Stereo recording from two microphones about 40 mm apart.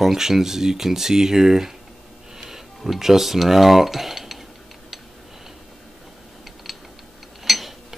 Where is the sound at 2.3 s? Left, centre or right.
Centre.